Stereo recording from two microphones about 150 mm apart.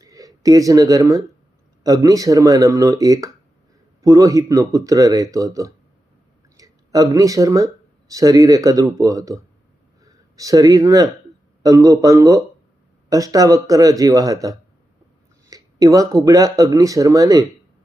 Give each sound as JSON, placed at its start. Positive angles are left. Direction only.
{"t": 0.0, "sound": "speech", "side_deg": -25}